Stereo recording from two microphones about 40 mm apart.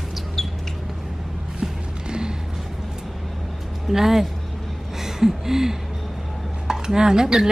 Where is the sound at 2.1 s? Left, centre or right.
Right.